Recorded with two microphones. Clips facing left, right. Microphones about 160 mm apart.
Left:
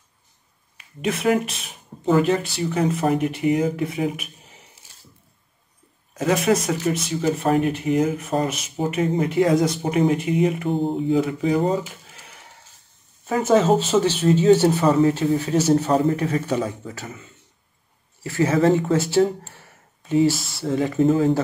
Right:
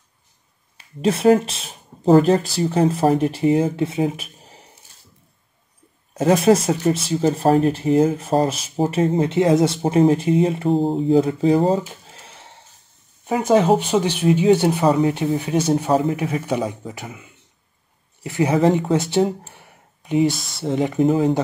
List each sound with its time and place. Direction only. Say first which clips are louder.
0.7 s speech: right 5 dB; 30° right (ahead or behind)
6.1 s speech: right 5 dB; 30° right (ahead or behind)
13.2 s speech: right 1 dB; 15° right (ahead or behind)